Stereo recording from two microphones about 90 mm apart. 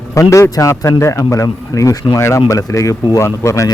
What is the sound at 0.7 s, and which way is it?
Speech, 30° left (ahead or behind).